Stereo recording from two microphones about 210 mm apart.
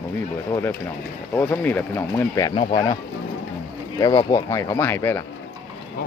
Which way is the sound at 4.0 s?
20° left (ahead or behind).